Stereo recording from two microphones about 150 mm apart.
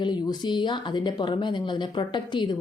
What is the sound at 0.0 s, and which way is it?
Speech, 30° left (ahead or behind).